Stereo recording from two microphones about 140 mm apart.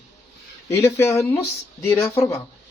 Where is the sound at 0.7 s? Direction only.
20° left (ahead or behind).